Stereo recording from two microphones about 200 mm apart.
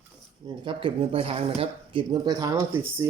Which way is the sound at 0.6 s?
25° right (ahead or behind).